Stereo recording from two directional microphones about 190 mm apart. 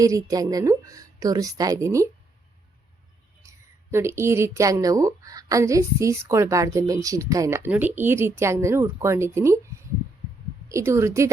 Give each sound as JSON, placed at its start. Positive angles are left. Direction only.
{"t": 0.0, "sound": "a woman's voice", "side_deg": -15}
{"t": 3.4, "sound": "a sound", "side_deg": -15}
{"t": 3.9, "sound": "a woman's voice", "side_deg": -15}
{"t": 10.7, "sound": "a woman's voice", "side_deg": -15}